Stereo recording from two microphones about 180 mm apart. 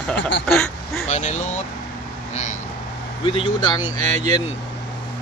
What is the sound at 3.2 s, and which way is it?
Speech, 30° left (ahead or behind).